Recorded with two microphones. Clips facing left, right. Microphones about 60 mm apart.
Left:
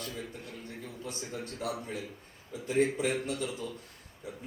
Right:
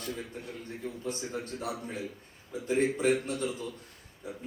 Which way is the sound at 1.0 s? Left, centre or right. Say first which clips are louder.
Right 2 dB; right.